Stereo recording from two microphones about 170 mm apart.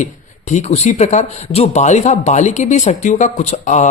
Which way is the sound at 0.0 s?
45° left (ahead or behind).